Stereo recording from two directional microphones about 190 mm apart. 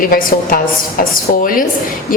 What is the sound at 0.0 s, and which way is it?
A woman's voice, 50° left (ahead or behind).